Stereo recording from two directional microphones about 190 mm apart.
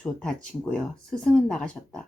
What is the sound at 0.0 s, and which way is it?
A woman's voice, 5° left (ahead or behind).